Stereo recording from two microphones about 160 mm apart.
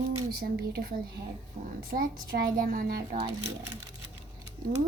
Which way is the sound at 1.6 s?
50° right (ahead or behind).